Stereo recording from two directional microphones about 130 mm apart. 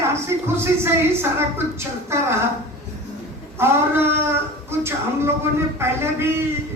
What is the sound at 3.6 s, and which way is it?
Speech, 20° right (ahead or behind).